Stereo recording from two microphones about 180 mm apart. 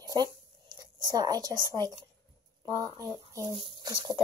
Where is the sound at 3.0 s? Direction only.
20° right (ahead or behind).